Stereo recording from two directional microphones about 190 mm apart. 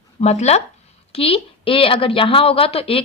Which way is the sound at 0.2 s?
35° left (ahead or behind).